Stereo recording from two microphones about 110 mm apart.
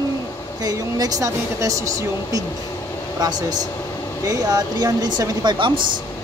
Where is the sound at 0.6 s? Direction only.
35° right (ahead or behind).